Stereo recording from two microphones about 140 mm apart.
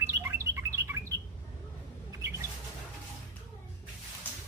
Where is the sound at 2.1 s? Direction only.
20° right (ahead or behind).